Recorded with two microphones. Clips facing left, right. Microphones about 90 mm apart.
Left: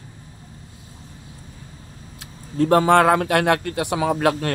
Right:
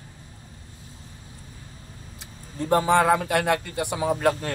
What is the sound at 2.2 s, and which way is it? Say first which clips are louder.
Speech: left 11 dB; 65° left (ahead or behind).